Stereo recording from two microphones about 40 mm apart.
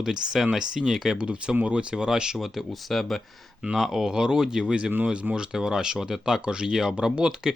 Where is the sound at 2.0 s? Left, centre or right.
Centre.